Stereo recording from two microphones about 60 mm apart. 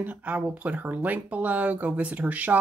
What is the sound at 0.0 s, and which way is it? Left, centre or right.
Speech, right.